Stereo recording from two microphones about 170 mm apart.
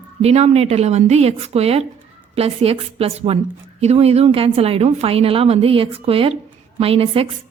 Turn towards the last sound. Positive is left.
turn(degrees=-35)  # may be behind; listen again after turning